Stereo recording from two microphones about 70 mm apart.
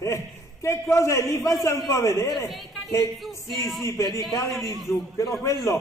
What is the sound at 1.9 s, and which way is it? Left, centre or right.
Speech, left.